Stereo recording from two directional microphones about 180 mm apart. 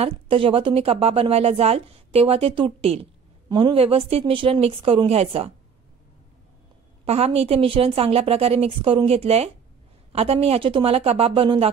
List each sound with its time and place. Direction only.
0.0 s speech: 30° right (ahead or behind)
7.1 s speech: 35° right (ahead or behind)